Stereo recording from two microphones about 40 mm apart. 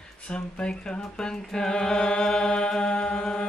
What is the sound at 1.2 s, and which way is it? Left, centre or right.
Chant, centre.